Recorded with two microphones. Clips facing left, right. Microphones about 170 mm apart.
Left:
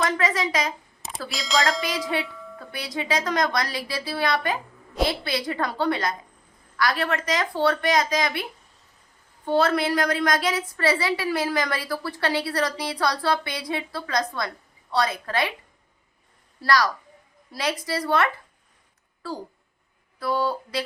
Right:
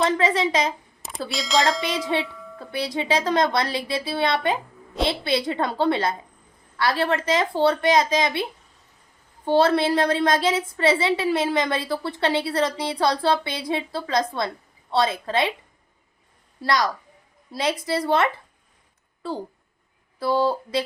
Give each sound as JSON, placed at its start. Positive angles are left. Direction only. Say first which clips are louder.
{"t": 0.0, "sound": "a woman's voice", "louder": "right 3 dB", "side_deg": -25}
{"t": 1.3, "sound": "speech", "louder": "right 2 dB", "side_deg": 0}
{"t": 2.2, "sound": "music", "louder": "right 1 dB", "side_deg": 0}
{"t": 2.6, "sound": "a woman's voice", "louder": "right 5 dB", "side_deg": -30}
{"t": 9.5, "sound": "a woman's voice", "louder": "right 3 dB", "side_deg": -30}
{"t": 16.6, "sound": "a woman's voice", "louder": "left 1 dB", "side_deg": -20}